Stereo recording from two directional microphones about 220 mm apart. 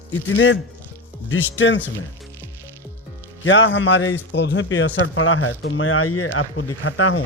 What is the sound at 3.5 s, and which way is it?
A man's voice, 55° left (ahead or behind).